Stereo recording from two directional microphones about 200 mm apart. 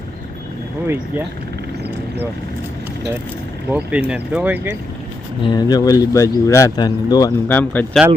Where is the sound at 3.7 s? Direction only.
5° right (ahead or behind).